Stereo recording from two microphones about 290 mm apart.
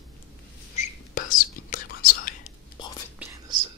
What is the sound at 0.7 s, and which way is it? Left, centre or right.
Whispering, left.